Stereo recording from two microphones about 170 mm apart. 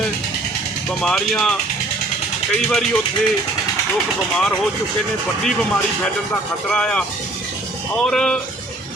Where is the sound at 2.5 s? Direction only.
5° left (ahead or behind).